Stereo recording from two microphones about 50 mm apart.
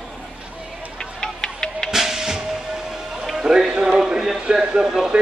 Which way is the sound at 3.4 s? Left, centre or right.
Centre.